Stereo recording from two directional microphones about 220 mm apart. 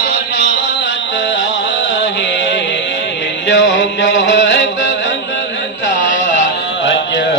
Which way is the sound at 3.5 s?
55° left (ahead or behind).